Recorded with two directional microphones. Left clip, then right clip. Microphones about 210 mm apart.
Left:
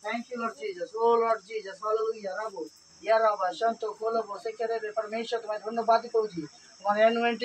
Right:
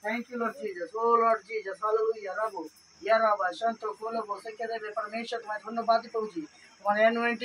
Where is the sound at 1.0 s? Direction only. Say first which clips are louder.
Left 3 dB; 5° left (ahead or behind).